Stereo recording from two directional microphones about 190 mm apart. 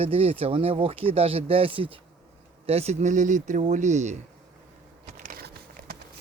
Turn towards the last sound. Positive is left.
turn(degrees=-50)  # may be behind; listen again after turning